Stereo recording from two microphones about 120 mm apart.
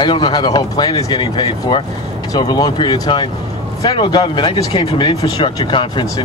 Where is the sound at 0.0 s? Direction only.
40° left (ahead or behind).